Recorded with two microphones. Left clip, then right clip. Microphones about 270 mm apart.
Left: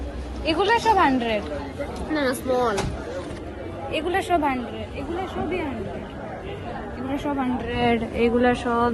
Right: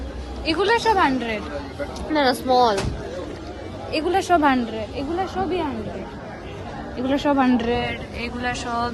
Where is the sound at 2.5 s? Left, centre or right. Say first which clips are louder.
Right 5 dB; right.